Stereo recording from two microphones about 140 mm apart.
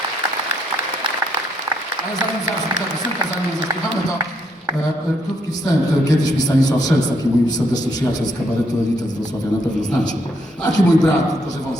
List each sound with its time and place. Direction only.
5.6 s a man's voice: 25° left (ahead or behind)
10.6 s a man's voice: 25° left (ahead or behind)